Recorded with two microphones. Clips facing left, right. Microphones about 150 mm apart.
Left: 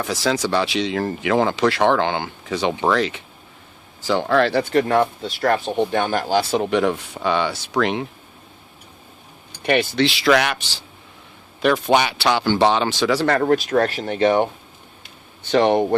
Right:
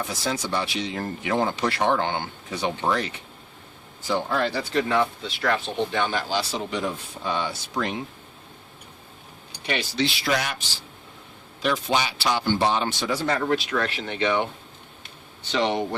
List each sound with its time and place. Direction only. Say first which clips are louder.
0.0 s speech: left 7 dB; 90° left
9.6 s speech: left 8 dB; 60° left (ahead or behind); by 10.8 s 75° left (ahead or behind)
11.6 s speech: left 7 dB; 60° left (ahead or behind)
13.4 s speech: left 7 dB; 45° left (ahead or behind)
15.4 s speech: left 8 dB; 55° left (ahead or behind)